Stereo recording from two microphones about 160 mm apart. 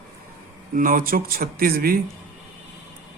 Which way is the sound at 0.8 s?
60° right (ahead or behind).